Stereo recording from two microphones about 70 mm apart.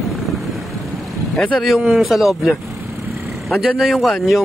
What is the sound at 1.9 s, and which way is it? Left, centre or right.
Speech, centre.